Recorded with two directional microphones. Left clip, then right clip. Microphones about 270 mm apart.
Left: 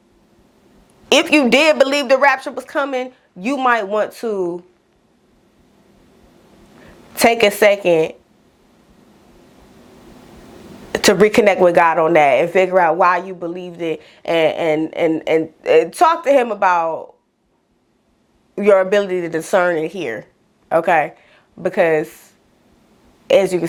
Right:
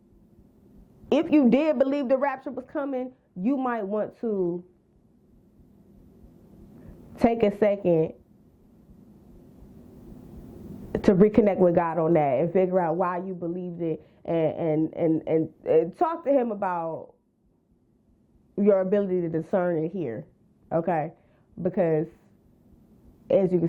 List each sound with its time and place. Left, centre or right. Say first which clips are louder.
1.0 s speech: left 9 dB; centre
4.4 s speech: left 4 dB; centre
6.5 s a sound: left 8 dB; centre
9.5 s speech: left 6 dB; centre
18.5 s a woman's voice: left 9 dB; centre